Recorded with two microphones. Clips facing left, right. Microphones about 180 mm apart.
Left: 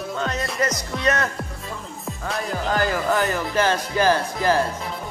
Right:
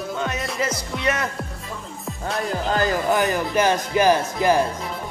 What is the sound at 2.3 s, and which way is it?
Music, centre (ahead or behind).